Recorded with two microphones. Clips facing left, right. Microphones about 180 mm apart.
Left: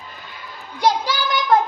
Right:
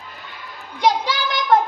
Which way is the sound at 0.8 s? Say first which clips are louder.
Even; centre (ahead or behind).